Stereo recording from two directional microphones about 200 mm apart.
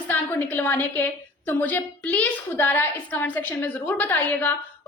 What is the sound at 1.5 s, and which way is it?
A woman's voice, 10° left (ahead or behind).